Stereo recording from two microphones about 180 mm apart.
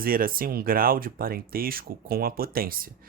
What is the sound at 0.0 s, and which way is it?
Speech, 55° right (ahead or behind).